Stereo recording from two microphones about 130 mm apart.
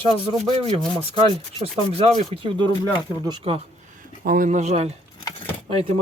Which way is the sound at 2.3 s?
45° right (ahead or behind).